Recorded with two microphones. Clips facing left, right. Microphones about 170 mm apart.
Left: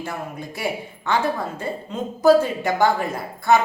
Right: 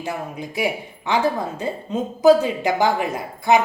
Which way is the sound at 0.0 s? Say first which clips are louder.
Right 2 dB; 15° right (ahead or behind).